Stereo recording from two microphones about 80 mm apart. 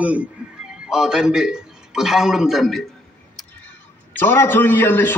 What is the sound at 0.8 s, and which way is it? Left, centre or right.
A man's voice, centre.